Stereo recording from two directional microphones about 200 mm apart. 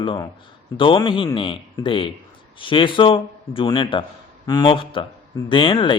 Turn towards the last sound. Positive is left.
turn(degrees=25)  # may be behind; listen again after turning